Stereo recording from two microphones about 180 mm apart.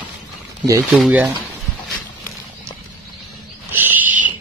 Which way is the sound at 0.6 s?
15° right (ahead or behind).